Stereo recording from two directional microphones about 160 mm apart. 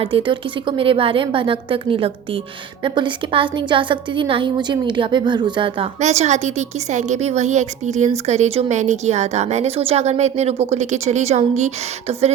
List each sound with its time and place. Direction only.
0.0 s a woman's voice: 35° right (ahead or behind)
6.0 s a woman's voice: 45° right (ahead or behind)